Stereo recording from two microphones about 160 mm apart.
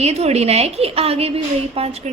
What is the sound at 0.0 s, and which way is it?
A woman's voice, 40° right (ahead or behind).